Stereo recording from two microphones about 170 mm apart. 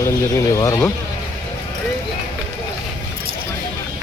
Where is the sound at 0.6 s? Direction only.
15° left (ahead or behind).